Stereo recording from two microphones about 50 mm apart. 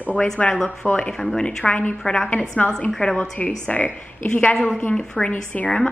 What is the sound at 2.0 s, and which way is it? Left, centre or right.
A woman's voice, centre.